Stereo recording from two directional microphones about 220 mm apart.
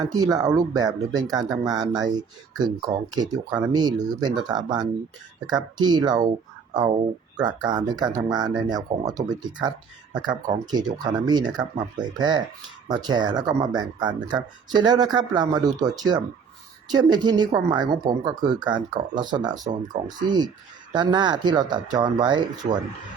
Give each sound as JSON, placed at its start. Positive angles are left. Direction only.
{"t": 0.0, "sound": "speech", "side_deg": -15}